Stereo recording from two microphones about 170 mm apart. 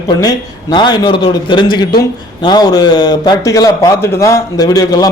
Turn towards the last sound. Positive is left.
turn(degrees=20)  # may be behind; listen again after turning